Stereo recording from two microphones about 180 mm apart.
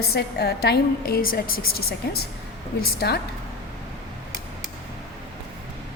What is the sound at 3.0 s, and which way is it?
Speech, 65° left (ahead or behind).